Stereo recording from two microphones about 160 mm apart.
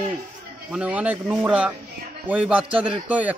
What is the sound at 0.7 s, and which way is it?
A man's voice, 10° right (ahead or behind).